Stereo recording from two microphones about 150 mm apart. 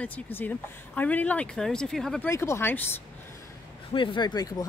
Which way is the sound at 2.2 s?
15° left (ahead or behind).